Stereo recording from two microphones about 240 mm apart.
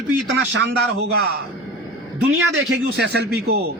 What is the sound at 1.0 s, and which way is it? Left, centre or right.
Speech, right.